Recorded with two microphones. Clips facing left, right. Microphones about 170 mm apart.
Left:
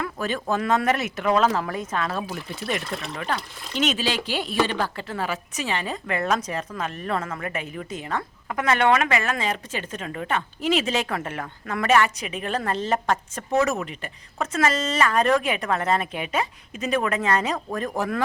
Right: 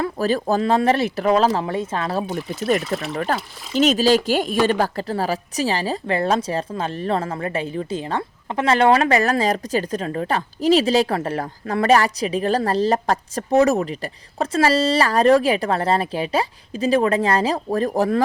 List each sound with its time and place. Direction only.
0.0 s a woman's voice: 35° right (ahead or behind)
2.8 s speech: centre (ahead or behind)
3.8 s a woman's voice: 40° right (ahead or behind)